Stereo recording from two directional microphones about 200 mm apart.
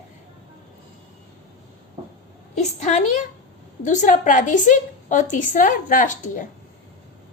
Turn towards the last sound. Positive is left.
turn(degrees=40)  # may be behind; listen again after turning